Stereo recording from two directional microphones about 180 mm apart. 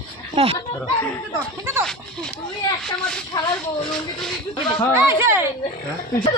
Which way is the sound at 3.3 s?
20° left (ahead or behind).